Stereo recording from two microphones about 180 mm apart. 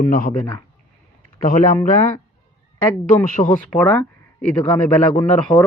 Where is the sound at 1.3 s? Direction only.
50° left (ahead or behind).